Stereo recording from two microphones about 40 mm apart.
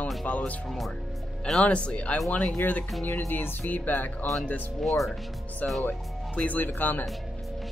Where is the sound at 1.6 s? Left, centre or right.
Left.